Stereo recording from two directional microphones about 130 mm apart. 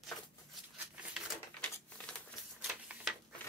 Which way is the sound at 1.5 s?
10° left (ahead or behind).